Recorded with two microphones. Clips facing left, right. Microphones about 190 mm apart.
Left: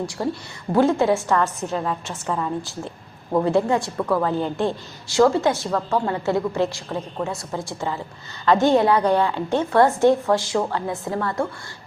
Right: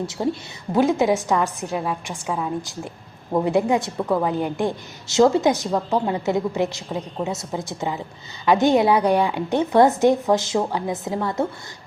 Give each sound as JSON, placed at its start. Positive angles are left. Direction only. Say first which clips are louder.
{"t": 0.2, "sound": "a woman's voice", "louder": "right 2 dB", "side_deg": -10}